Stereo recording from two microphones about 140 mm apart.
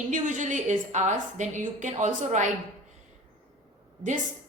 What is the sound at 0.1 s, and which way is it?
A woman's voice, 65° right (ahead or behind).